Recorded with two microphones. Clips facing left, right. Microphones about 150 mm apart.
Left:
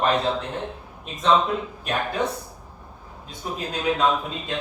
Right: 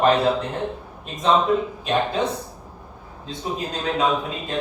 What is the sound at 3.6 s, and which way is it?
Speech, centre (ahead or behind).